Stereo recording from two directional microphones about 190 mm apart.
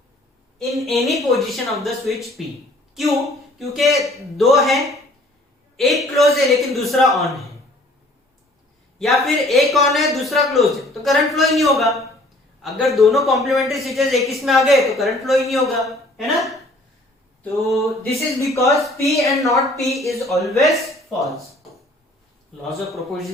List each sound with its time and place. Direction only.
0.7 s a man's voice: centre (ahead or behind)
9.0 s a man's voice: centre (ahead or behind)
18.4 s speech: 15° left (ahead or behind)
18.9 s a man's voice: centre (ahead or behind)
22.9 s a man's voice: centre (ahead or behind)